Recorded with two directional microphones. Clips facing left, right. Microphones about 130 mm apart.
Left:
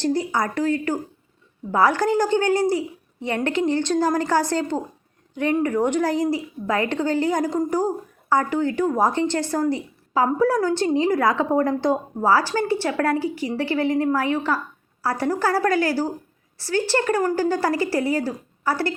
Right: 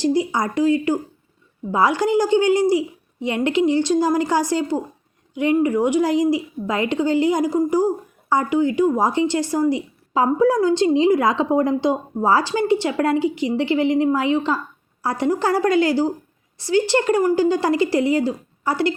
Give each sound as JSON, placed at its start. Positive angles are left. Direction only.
{"t": 0.0, "sound": "a woman's voice", "side_deg": -15}